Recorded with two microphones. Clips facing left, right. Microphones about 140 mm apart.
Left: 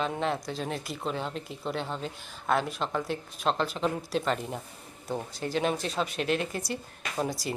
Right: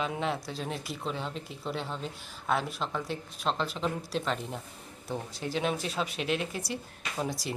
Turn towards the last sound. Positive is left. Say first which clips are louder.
# left 2 dB
turn(degrees=0)  # may be behind; listen again after turning